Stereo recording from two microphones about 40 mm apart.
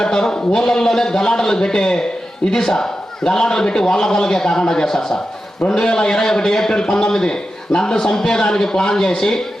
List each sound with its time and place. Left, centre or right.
0.0 s a man's voice: centre